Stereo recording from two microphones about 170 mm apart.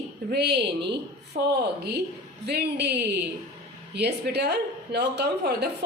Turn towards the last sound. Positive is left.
turn(degrees=-75)  # may be behind; listen again after turning